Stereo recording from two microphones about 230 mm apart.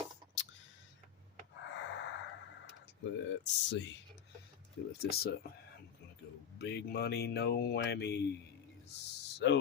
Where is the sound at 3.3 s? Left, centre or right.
Left.